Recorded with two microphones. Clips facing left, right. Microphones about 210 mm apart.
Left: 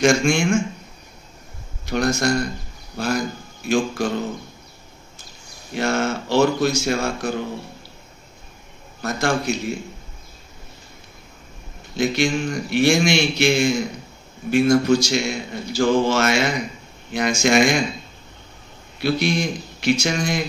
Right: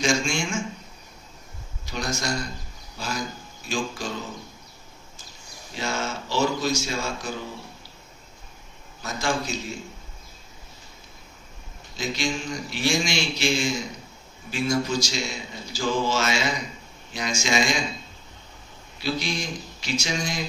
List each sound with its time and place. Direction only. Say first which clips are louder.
0.0 s speech: left 8 dB; 60° left (ahead or behind)
1.9 s speech: left 9 dB; 60° left (ahead or behind)
5.7 s speech: left 8 dB; 60° left (ahead or behind)
9.0 s speech: left 6 dB; 60° left (ahead or behind)
11.9 s speech: left 8 dB; 60° left (ahead or behind)
18.9 s speech: left 8 dB; 60° left (ahead or behind)